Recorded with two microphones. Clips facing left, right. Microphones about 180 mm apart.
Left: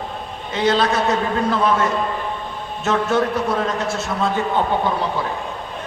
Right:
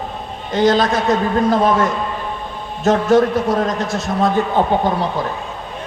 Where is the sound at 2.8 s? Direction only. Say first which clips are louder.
Right 6 dB; 40° right (ahead or behind).